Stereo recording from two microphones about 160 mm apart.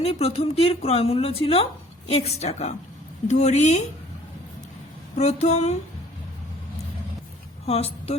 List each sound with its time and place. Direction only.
0.0 s a woman's voice: 40° left (ahead or behind)
5.1 s speech: 45° left (ahead or behind)
7.7 s a woman's voice: 40° left (ahead or behind)